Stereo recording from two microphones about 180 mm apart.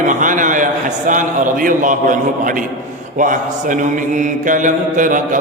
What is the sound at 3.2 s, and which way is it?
Mantra, 45° right (ahead or behind).